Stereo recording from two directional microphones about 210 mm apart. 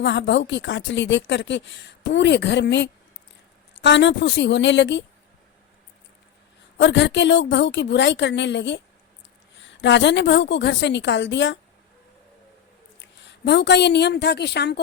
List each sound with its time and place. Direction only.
0.0 s speech: 55° left (ahead or behind)
6.7 s speech: 55° left (ahead or behind)
13.0 s a woman's voice: 55° left (ahead or behind)